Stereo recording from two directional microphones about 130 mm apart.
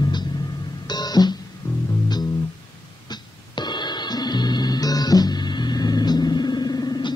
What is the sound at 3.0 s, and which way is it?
Music, 35° left (ahead or behind).